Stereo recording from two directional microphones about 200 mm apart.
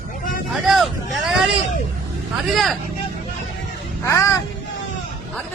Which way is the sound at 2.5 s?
Centre (ahead or behind).